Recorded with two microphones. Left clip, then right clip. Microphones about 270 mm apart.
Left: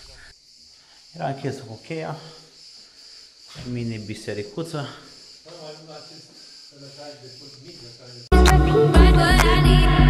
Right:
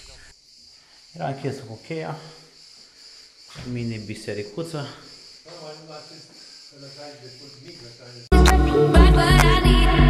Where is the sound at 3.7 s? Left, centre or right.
Centre.